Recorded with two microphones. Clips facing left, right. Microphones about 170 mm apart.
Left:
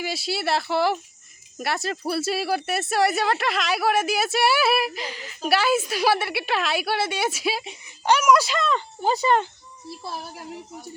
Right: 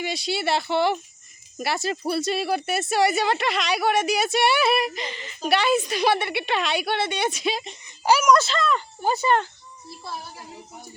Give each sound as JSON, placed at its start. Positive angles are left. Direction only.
{"t": 0.0, "sound": "speech", "side_deg": 5}
{"t": 8.0, "sound": "speech", "side_deg": -5}
{"t": 8.3, "sound": "speech", "side_deg": 10}